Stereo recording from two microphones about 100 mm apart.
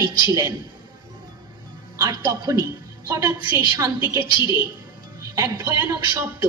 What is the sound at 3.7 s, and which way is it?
Speech, 35° right (ahead or behind).